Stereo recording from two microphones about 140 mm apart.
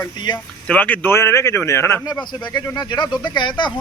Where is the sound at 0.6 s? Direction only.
10° left (ahead or behind).